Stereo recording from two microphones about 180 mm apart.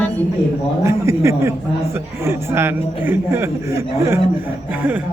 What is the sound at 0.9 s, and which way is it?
A man's voice, 15° right (ahead or behind).